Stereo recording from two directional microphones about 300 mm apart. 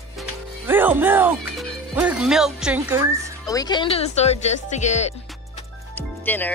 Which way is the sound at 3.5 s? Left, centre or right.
Centre.